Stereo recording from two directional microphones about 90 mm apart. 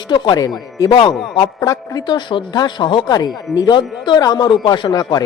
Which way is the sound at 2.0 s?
60° left (ahead or behind).